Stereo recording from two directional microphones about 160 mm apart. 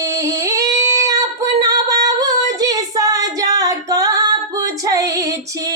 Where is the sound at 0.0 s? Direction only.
20° right (ahead or behind).